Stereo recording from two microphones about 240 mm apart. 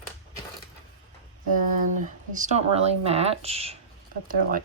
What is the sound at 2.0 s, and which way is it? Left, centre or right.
Speech, right.